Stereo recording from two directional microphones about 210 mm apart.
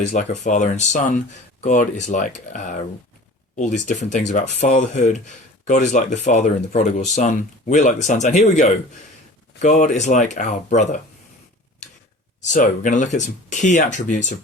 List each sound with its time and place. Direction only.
0.0 s speech: 35° left (ahead or behind)
12.4 s speech: 35° left (ahead or behind)